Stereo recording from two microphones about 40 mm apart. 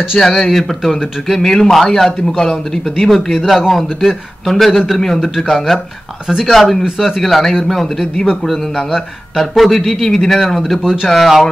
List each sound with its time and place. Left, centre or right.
0.2 s a man's voice: centre
6.8 s speech: centre
7.2 s a man's voice: centre
10.8 s speech: centre
11.1 s a man's voice: centre